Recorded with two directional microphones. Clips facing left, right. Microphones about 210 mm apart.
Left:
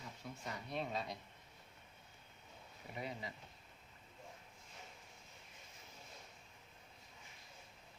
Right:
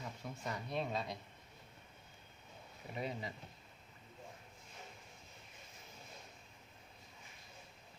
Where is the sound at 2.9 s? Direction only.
25° right (ahead or behind).